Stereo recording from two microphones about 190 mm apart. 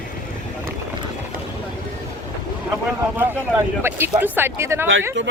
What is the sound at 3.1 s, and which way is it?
Speech, 10° right (ahead or behind).